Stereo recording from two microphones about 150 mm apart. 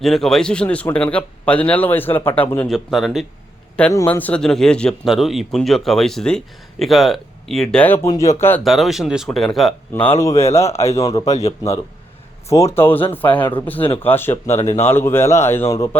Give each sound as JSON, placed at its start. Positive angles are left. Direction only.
{"t": 0.0, "sound": "speech", "side_deg": 0}
{"t": 2.6, "sound": "speech", "side_deg": 0}
{"t": 3.9, "sound": "speech", "side_deg": 15}
{"t": 8.6, "sound": "speech", "side_deg": 0}
{"t": 10.2, "sound": "speech", "side_deg": 20}
{"t": 10.8, "sound": "a man's voice", "side_deg": 40}
{"t": 12.5, "sound": "speech", "side_deg": 20}